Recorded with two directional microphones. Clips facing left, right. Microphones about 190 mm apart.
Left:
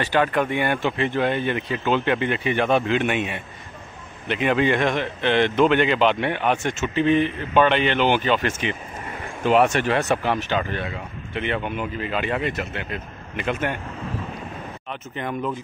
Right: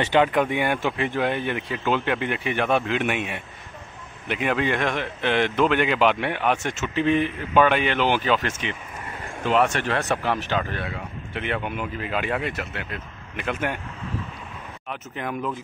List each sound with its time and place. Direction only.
0.0 s speech: 20° right (ahead or behind); by 8.5 s centre (ahead or behind)
9.5 s speech: 10° left (ahead or behind)
14.9 s speech: 5° right (ahead or behind)